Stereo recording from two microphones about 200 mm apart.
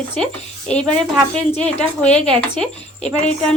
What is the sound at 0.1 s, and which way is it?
Speech, 30° left (ahead or behind).